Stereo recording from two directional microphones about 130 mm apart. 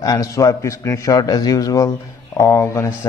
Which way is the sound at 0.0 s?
30° left (ahead or behind).